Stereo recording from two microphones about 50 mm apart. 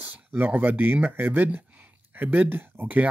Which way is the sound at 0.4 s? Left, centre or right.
Right.